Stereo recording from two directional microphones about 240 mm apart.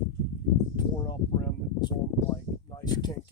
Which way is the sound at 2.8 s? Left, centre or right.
Centre.